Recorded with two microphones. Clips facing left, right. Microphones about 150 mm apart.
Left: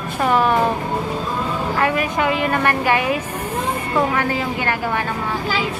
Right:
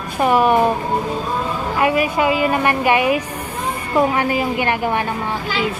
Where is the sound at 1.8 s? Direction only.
10° right (ahead or behind).